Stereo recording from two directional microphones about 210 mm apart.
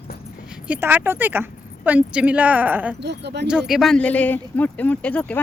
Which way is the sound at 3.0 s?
55° right (ahead or behind).